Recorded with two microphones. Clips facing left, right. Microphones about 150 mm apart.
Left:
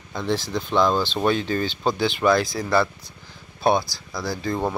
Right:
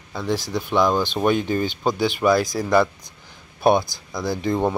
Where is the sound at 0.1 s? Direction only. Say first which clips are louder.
Right 1 dB; 10° right (ahead or behind).